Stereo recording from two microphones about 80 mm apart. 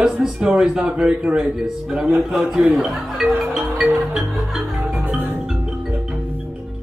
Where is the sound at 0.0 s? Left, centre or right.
Centre.